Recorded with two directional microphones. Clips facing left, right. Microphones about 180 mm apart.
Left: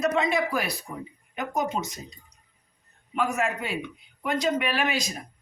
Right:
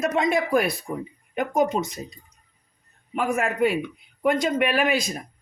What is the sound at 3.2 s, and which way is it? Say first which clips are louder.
Speech: right 4 dB; 55° right (ahead or behind).